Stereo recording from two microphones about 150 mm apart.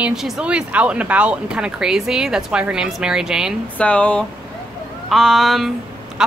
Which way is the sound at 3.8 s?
10° left (ahead or behind).